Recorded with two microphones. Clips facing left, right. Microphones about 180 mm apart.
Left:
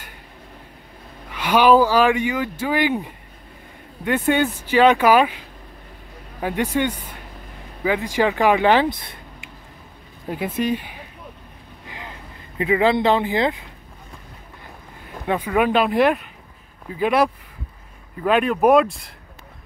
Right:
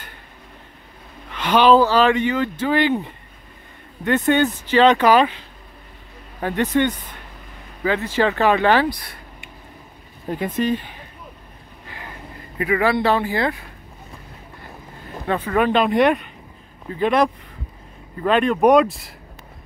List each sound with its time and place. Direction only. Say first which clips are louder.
1.3 s speech: right 1 dB; 10° left (ahead or behind)
6.4 s speech: right 2 dB; 10° left (ahead or behind)
10.2 s speech: right 1 dB; 10° left (ahead or behind)
12.5 s speech: left 1 dB; 20° left (ahead or behind)
15.2 s speech: even; 10° left (ahead or behind)